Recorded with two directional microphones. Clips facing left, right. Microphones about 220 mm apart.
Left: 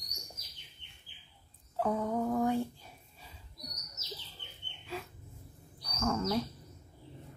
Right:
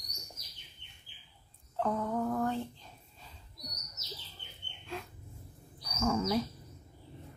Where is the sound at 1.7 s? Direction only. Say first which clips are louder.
Left 1 dB; 10° left (ahead or behind).